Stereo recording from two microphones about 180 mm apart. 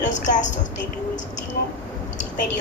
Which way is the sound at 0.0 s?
45° left (ahead or behind).